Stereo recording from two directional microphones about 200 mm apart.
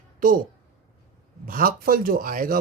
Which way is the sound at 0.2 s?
40° right (ahead or behind).